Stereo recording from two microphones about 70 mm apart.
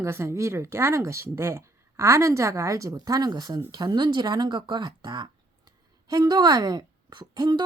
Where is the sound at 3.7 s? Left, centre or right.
Right.